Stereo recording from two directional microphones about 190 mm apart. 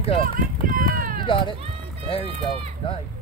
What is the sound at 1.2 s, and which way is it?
Speech, 25° left (ahead or behind).